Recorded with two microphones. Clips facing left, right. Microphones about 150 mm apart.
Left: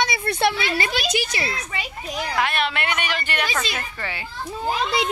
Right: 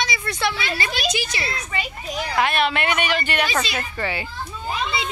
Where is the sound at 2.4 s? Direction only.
15° right (ahead or behind).